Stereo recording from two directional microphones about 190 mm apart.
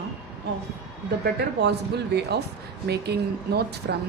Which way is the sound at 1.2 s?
60° right (ahead or behind).